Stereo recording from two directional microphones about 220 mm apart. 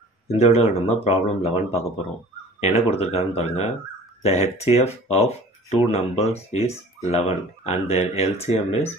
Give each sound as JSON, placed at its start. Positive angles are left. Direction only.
{"t": 0.3, "sound": "speech", "side_deg": 25}